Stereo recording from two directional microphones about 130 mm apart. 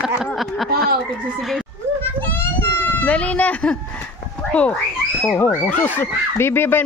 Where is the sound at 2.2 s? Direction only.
15° left (ahead or behind).